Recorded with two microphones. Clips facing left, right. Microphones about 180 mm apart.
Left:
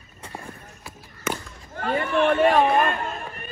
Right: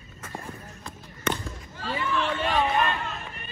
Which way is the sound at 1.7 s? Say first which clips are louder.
Left 6 dB; 55° left (ahead or behind).